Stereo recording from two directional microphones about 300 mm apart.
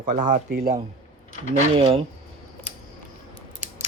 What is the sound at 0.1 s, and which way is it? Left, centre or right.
Speech, right.